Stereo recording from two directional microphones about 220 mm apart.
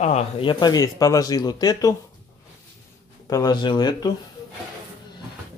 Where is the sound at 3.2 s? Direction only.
15° left (ahead or behind).